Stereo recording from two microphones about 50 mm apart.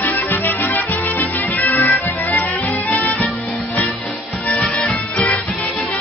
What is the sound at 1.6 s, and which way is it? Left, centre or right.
Music, left.